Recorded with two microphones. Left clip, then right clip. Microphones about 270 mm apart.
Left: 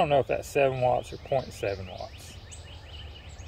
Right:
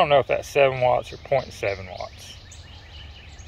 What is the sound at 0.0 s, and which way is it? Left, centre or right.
Speech, centre.